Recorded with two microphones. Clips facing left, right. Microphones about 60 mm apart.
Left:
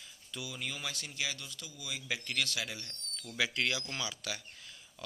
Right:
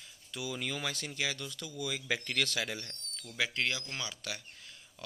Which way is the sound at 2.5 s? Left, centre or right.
Right.